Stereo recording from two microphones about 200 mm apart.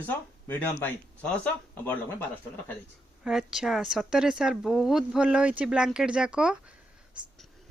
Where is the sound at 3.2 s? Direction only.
Centre (ahead or behind).